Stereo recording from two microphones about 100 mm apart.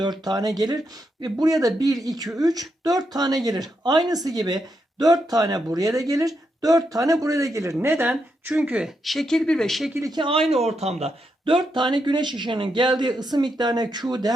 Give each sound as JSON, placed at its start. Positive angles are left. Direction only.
{"t": 0.0, "sound": "speech", "side_deg": -45}
{"t": 9.0, "sound": "speech", "side_deg": 5}
{"t": 10.1, "sound": "speech", "side_deg": -55}
{"t": 10.5, "sound": "speech", "side_deg": -90}
{"t": 11.5, "sound": "speech", "side_deg": -50}